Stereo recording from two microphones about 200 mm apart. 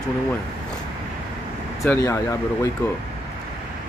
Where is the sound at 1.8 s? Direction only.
15° left (ahead or behind).